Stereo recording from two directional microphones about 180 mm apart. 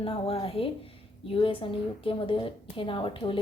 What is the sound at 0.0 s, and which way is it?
A woman's voice, 30° left (ahead or behind).